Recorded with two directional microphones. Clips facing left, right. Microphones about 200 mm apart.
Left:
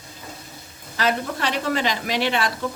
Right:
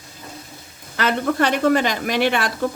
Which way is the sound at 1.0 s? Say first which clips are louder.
Right 4 dB; 55° right (ahead or behind).